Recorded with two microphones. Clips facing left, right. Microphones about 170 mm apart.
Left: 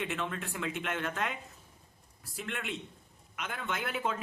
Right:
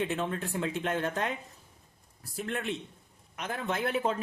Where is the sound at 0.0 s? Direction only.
35° right (ahead or behind).